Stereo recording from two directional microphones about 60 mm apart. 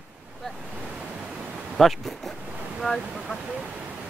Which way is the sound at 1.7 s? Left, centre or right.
Centre.